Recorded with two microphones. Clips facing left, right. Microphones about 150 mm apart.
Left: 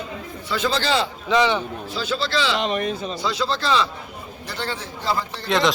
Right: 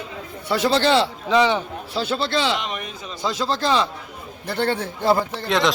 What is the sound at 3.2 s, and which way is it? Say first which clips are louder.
A man's voice: right 5 dB; 45° right (ahead or behind).